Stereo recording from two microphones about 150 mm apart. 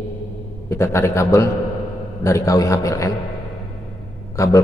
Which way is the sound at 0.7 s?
15° left (ahead or behind).